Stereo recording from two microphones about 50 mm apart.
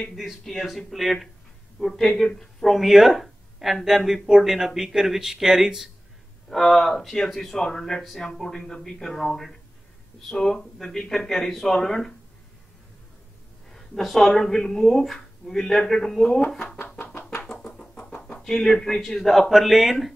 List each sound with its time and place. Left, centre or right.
0.1 s speech: centre
2.7 s speech: centre
6.5 s speech: centre
13.7 s speech: centre
17.5 s a sound: centre
18.4 s speech: centre